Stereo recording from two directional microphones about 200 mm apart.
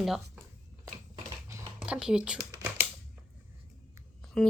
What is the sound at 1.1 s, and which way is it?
Computer keyboard, 15° right (ahead or behind).